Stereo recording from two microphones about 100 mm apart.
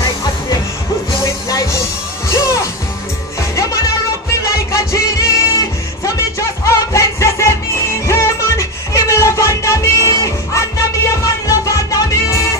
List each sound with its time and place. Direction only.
1.2 s music: 35° left (ahead or behind)